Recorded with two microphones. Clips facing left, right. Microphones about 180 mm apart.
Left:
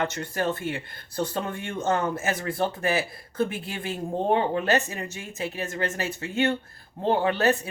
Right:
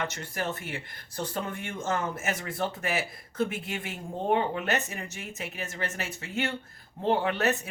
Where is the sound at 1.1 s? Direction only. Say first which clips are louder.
Left 4 dB; 30° left (ahead or behind).